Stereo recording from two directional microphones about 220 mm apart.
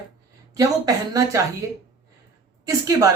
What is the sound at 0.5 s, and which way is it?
Speech, 15° right (ahead or behind).